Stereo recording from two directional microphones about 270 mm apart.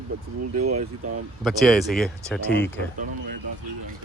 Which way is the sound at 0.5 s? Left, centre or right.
Right.